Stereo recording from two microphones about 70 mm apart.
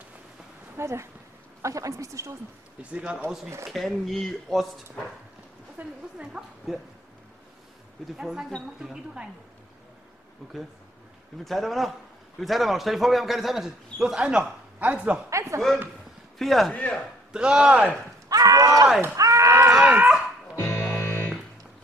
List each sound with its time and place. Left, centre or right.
0.7 s a woman's voice: right
2.8 s speech: centre
3.6 s a man's voice: centre
5.8 s a woman's voice: right
8.2 s speech: centre
10.4 s a man's voice: centre
15.2 s a woman's voice: right
16.3 s a man's voice: centre
16.7 s speech: centre
17.3 s speech: centre
18.3 s run: right
19.1 s a sound: right
19.7 s dog: centre
20.5 s music: left